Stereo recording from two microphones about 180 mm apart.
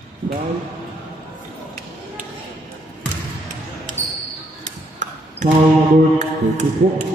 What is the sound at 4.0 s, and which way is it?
Basketball bounce, 10° right (ahead or behind).